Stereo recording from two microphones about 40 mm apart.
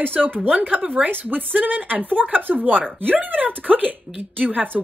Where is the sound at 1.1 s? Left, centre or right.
Right.